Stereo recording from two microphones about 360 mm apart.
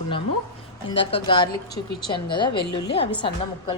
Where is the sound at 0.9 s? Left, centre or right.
Centre.